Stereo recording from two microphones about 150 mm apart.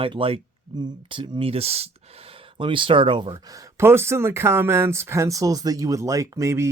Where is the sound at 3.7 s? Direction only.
15° right (ahead or behind).